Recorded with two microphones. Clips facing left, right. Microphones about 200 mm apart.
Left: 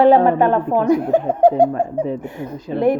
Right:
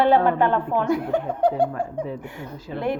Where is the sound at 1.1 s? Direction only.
45° left (ahead or behind).